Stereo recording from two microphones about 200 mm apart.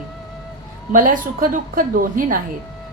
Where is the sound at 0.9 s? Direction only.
40° right (ahead or behind).